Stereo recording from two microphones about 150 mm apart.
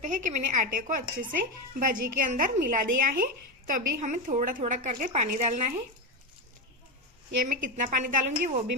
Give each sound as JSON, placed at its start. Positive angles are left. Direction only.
{"t": 0.1, "sound": "a woman's voice", "side_deg": -55}
{"t": 7.4, "sound": "a woman's voice", "side_deg": -55}